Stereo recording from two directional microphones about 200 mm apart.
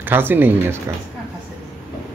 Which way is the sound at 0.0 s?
10° right (ahead or behind).